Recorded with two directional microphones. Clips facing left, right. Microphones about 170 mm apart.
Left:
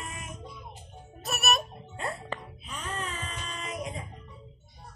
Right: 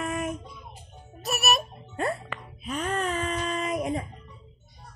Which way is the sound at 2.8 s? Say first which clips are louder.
Right 9 dB; 75° right (ahead or behind).